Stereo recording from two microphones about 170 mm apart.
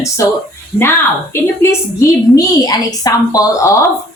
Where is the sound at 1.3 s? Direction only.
15° left (ahead or behind).